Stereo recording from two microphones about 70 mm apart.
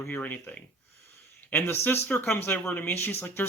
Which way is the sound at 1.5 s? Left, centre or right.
Left.